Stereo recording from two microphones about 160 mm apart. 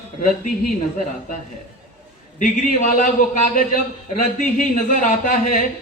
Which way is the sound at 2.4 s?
55° left (ahead or behind).